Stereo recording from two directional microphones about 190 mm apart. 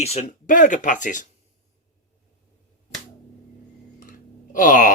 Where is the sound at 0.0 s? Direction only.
35° left (ahead or behind).